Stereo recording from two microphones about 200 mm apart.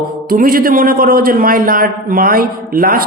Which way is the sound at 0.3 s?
45° right (ahead or behind).